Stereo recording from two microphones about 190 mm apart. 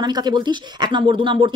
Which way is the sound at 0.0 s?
20° right (ahead or behind).